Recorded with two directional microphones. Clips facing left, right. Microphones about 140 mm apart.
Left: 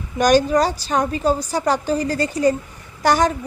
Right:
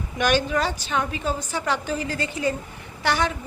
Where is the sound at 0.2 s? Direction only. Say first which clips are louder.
Left 7 dB; 40° left (ahead or behind).